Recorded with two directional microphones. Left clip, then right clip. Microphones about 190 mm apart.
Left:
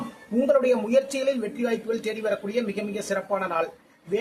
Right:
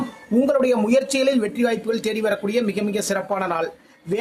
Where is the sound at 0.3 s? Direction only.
40° right (ahead or behind).